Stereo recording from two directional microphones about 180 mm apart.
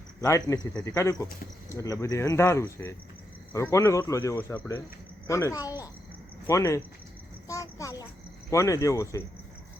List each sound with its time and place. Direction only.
0.2 s speech: 20° left (ahead or behind)
7.4 s a sound: 15° left (ahead or behind)
8.4 s speech: 15° left (ahead or behind)